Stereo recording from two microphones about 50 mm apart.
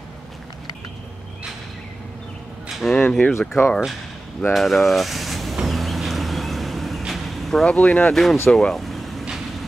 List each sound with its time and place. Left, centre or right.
2.8 s a sound: centre
3.6 s speech: left
4.6 s speech: centre
5.7 s vehicle: centre
7.0 s a sound: centre
7.6 s speech: left
8.1 s speech: centre
8.5 s vehicle: centre